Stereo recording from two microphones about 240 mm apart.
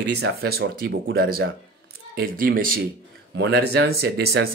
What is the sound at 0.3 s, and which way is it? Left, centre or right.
Speech, right.